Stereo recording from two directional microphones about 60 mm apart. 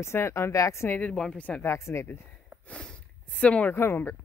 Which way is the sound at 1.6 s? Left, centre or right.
Left.